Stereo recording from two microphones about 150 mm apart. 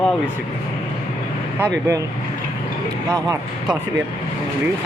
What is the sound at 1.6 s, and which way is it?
Speech, 20° right (ahead or behind).